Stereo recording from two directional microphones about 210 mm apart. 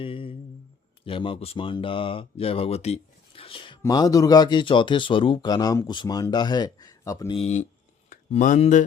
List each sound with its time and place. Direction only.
0.0 s a sound: 25° left (ahead or behind)
1.0 s speech: 25° left (ahead or behind)
7.3 s speech: 30° left (ahead or behind)